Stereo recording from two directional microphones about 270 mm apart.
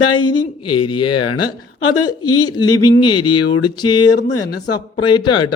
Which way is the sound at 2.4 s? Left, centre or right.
Centre.